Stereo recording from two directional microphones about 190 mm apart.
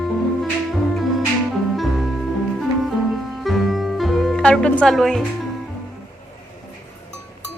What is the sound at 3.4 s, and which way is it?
Music, centre (ahead or behind).